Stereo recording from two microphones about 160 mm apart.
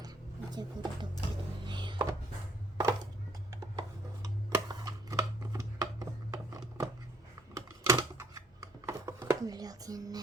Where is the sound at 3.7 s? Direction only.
25° right (ahead or behind).